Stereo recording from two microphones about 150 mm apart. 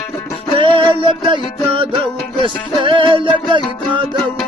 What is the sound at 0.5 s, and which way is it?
Music, 35° right (ahead or behind).